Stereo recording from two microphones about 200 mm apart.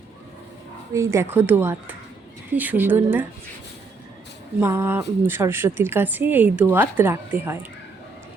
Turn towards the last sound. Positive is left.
turn(degrees=-10)  # may be behind; listen again after turning